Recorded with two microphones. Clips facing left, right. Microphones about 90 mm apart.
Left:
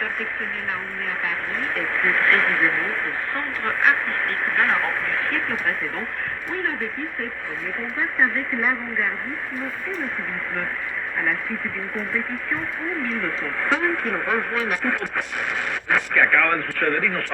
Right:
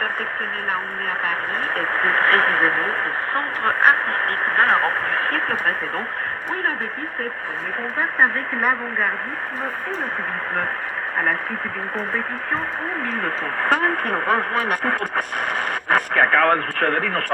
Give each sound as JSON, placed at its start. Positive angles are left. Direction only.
{"t": 1.3, "sound": "speech", "side_deg": -45}
{"t": 7.9, "sound": "speech", "side_deg": -45}
{"t": 13.2, "sound": "speech", "side_deg": -50}